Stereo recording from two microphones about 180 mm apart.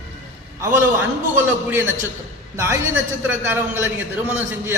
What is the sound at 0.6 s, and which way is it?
A man's voice, 10° right (ahead or behind).